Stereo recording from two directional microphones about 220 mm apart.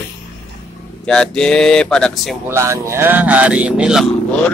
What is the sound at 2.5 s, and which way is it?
Speech, 10° right (ahead or behind).